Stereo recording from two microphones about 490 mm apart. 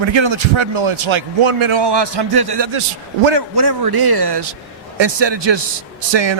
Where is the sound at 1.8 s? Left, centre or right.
Right.